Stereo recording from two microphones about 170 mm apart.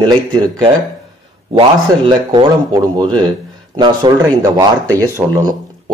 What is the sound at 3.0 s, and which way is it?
Speech, 25° right (ahead or behind).